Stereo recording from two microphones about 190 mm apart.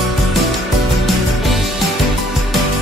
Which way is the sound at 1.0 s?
Centre (ahead or behind).